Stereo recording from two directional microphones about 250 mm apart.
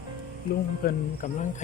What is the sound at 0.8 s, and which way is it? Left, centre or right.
Speech, left.